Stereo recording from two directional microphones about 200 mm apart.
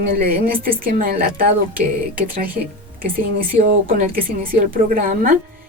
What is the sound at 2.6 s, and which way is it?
Speech, 40° right (ahead or behind).